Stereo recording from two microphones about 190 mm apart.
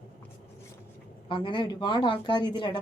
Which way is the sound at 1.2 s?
25° left (ahead or behind).